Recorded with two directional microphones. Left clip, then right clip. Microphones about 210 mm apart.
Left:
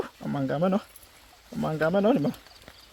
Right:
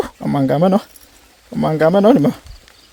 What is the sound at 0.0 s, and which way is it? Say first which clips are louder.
Speech: right 13 dB; 55° right (ahead or behind).